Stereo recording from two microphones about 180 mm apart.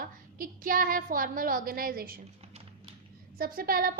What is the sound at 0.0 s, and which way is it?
A woman's voice, 50° right (ahead or behind).